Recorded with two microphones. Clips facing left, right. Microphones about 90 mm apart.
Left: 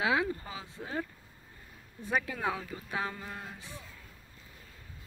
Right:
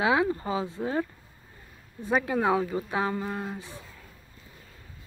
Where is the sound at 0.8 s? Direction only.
50° right (ahead or behind).